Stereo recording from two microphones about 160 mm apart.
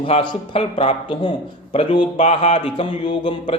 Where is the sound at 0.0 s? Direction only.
35° left (ahead or behind).